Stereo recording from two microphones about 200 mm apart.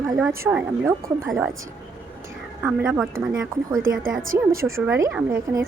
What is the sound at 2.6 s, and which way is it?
Speech, 10° right (ahead or behind).